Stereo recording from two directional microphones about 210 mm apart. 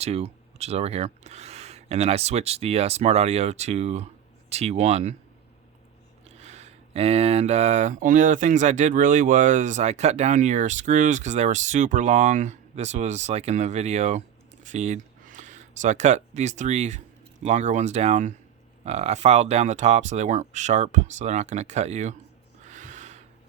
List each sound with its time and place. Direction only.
0.0 s speech: 30° right (ahead or behind)
6.2 s speech: 30° right (ahead or behind)
22.6 s a sound: 35° right (ahead or behind)